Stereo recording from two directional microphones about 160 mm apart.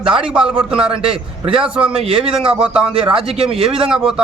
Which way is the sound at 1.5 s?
35° right (ahead or behind).